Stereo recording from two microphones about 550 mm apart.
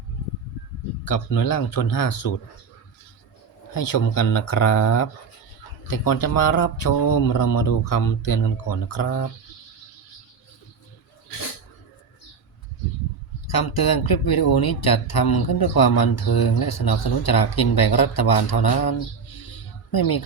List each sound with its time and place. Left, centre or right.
1.0 s speech: left
3.7 s speech: left
13.5 s speech: left